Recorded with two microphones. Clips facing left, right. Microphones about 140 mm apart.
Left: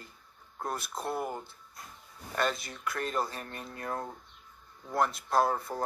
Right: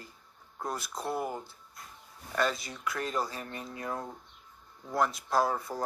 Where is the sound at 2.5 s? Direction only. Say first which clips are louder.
Even; 55° left (ahead or behind).